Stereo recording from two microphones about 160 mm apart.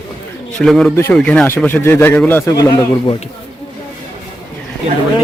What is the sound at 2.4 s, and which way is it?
Speech, 20° left (ahead or behind).